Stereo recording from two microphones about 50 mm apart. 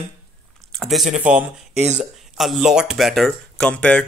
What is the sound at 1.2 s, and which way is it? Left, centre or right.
Speech, right.